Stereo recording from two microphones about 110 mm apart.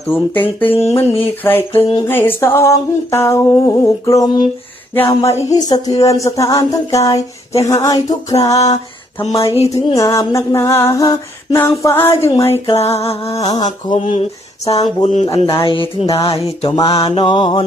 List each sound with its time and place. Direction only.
0.1 s a sound: 15° left (ahead or behind); by 4.4 s 35° left (ahead or behind)
4.9 s music: 25° left (ahead or behind)
9.2 s speech: 60° left (ahead or behind)
9.6 s a sound: 30° left (ahead or behind)
13.0 s speech: 65° left (ahead or behind)
13.3 s music: 35° left (ahead or behind)
13.9 s speech: 90° left
14.6 s music: 30° left (ahead or behind)
15.0 s speech: 80° left
15.4 s mantra: 50° left (ahead or behind)
16.1 s speech: 65° left (ahead or behind)
16.6 s music: 40° left (ahead or behind)
16.9 s mantra: 55° left (ahead or behind)